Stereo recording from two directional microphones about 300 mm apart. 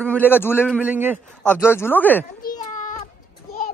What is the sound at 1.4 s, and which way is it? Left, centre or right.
Speech, centre.